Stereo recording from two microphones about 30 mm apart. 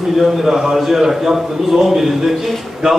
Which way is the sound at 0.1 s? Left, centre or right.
Centre.